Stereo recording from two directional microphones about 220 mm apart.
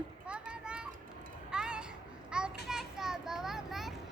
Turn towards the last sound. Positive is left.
turn(degrees=0)  # may be behind; listen again after turning